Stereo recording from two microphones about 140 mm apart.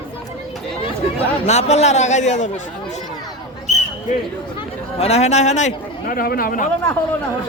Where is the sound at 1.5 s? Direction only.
50° left (ahead or behind).